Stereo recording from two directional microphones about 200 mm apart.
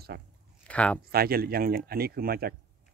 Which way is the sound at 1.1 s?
50° right (ahead or behind).